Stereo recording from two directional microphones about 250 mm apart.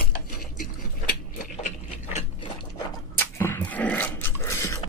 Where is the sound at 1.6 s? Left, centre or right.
Left.